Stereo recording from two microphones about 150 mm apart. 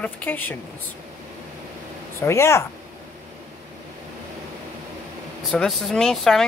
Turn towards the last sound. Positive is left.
turn(degrees=5)  # may be behind; listen again after turning